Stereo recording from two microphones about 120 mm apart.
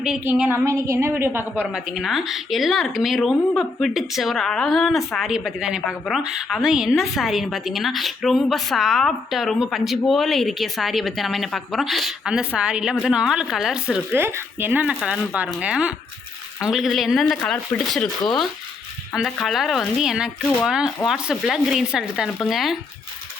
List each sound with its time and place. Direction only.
0.3 s a woman's voice: 15° right (ahead or behind)
1.7 s speech: 5° right (ahead or behind)
14.2 s speech: 20° right (ahead or behind); by 18.1 s 5° left (ahead or behind)
19.1 s speech: centre (ahead or behind)